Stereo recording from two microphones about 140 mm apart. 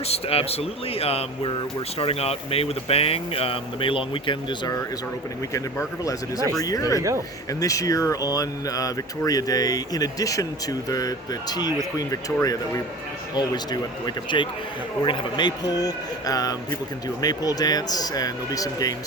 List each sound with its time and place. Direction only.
0.1 s speech: 45° left (ahead or behind)
5.5 s speech: 20° left (ahead or behind)
14.3 s a man's voice: 35° left (ahead or behind)